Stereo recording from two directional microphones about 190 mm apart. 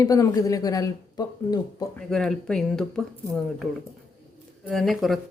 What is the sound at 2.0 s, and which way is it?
A woman's voice, 5° left (ahead or behind).